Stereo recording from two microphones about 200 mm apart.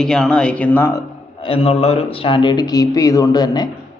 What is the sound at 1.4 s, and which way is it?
Speech, 30° left (ahead or behind).